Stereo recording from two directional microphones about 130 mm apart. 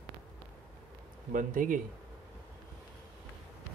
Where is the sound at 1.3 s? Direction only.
90° right.